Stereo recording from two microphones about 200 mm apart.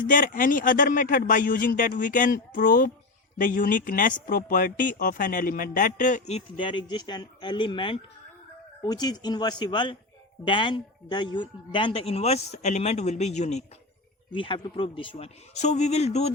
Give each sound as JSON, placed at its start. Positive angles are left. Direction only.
{"t": 0.0, "sound": "a man's voice", "side_deg": 40}